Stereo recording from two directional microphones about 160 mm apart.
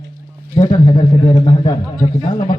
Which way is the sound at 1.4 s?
30° left (ahead or behind).